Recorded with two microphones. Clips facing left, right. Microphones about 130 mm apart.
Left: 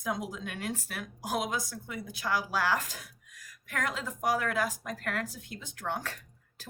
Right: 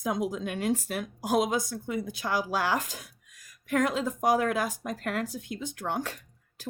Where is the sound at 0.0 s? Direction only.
20° right (ahead or behind).